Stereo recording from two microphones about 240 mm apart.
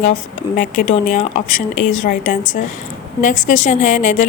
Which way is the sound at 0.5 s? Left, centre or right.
Left.